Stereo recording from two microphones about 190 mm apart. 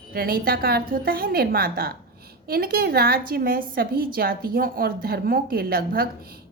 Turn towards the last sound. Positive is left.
turn(degrees=-50)  # may be behind; listen again after turning